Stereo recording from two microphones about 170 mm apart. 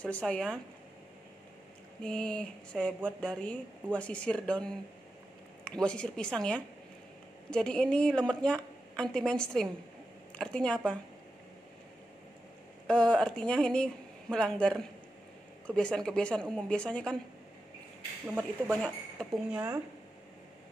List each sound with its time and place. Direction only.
0.0 s speech: 5° left (ahead or behind)
2.0 s a woman's voice: 5° left (ahead or behind)
12.8 s a woman's voice: 5° left (ahead or behind)
18.2 s a woman's voice: 10° right (ahead or behind)